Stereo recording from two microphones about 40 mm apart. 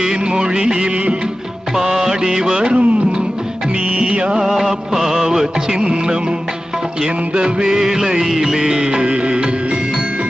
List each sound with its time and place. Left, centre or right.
0.0 s music: centre
4.1 s music: right
4.5 s music: centre
7.3 s music: right
7.7 s music: centre